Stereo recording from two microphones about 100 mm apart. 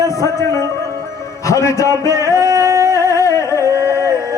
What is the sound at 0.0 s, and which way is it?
Music, 30° left (ahead or behind).